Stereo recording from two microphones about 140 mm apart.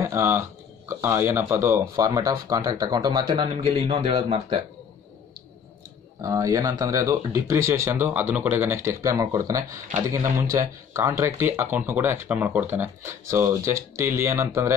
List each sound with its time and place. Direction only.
0.0 s a sound: 15° right (ahead or behind)
0.8 s speech: 20° right (ahead or behind)
3.4 s a man's voice: 50° right (ahead or behind)
6.2 s speech: 25° right (ahead or behind)